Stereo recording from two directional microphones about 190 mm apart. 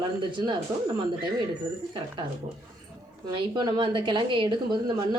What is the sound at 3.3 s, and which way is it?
A woman's voice, 25° right (ahead or behind).